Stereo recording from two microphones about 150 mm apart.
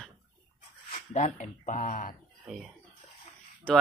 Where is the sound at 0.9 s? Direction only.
55° left (ahead or behind).